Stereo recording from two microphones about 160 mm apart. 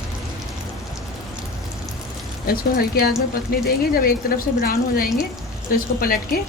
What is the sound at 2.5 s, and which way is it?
A woman's voice, 70° left (ahead or behind).